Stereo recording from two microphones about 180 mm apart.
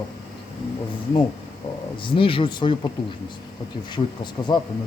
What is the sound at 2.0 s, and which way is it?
Speech, 30° left (ahead or behind).